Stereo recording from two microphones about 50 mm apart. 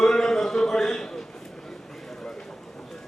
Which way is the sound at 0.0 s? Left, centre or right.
Centre.